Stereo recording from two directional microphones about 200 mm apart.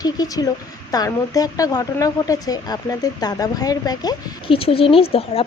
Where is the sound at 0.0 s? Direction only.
20° left (ahead or behind).